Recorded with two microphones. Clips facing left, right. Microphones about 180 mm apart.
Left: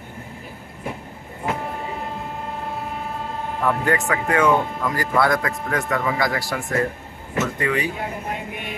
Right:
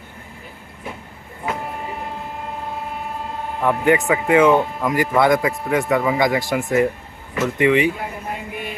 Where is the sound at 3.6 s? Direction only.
20° right (ahead or behind).